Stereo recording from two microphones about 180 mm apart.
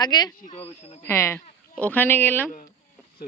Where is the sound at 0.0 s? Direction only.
20° left (ahead or behind).